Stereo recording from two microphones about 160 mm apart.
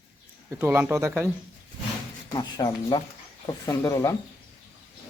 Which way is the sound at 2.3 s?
30° left (ahead or behind).